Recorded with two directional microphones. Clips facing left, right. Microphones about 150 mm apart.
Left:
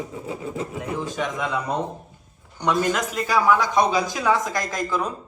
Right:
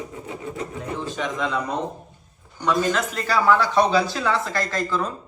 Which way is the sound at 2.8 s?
10° left (ahead or behind).